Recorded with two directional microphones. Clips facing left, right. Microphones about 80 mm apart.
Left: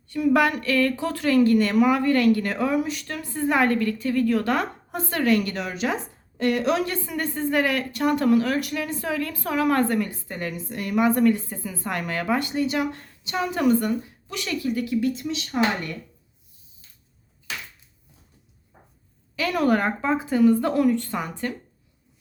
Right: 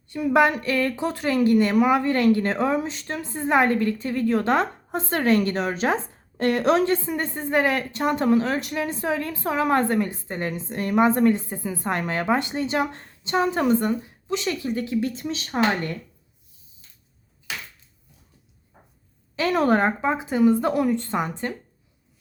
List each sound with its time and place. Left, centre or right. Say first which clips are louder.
0.1 s speech: right 1 dB; right
6.9 s speech: right 3 dB; right
19.4 s speech: right 2 dB; right